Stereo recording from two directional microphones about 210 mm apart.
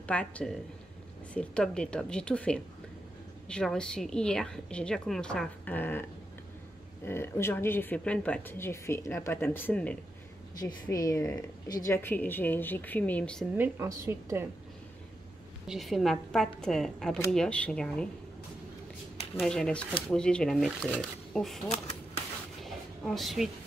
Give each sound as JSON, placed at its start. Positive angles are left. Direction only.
{"t": 0.0, "sound": "a woman's voice", "side_deg": 5}
{"t": 7.1, "sound": "speech", "side_deg": 10}
{"t": 13.6, "sound": "a woman's voice", "side_deg": -15}
{"t": 15.6, "sound": "a woman's voice", "side_deg": 0}
{"t": 19.4, "sound": "a woman's voice", "side_deg": 5}
{"t": 21.6, "sound": "typewriter", "side_deg": 30}
{"t": 22.6, "sound": "a sound", "side_deg": 0}